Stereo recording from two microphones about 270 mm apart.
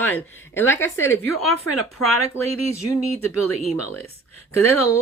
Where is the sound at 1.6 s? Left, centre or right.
Left.